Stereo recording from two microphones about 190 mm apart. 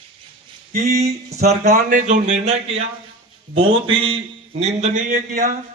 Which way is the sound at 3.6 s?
30° right (ahead or behind).